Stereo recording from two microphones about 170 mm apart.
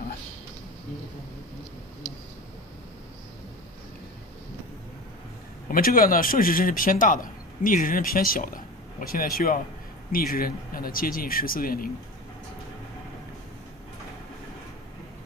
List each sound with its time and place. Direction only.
5.7 s speech: 55° left (ahead or behind)